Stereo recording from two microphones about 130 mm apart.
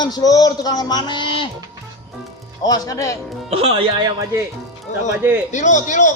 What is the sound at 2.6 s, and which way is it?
Speech, 30° left (ahead or behind).